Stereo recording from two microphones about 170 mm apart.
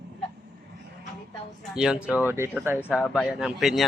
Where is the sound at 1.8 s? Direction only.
5° right (ahead or behind).